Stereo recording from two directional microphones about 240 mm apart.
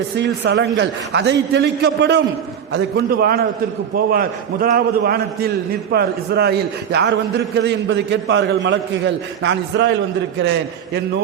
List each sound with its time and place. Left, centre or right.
0.2 s a man's voice: right